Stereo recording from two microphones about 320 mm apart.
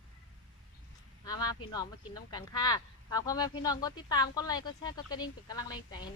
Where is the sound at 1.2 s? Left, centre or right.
Centre.